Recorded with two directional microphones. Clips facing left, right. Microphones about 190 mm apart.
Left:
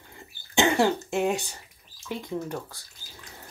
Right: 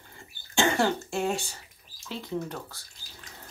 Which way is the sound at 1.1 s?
15° left (ahead or behind).